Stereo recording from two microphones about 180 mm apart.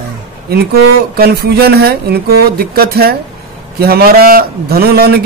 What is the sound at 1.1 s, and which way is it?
A man's voice, 60° right (ahead or behind).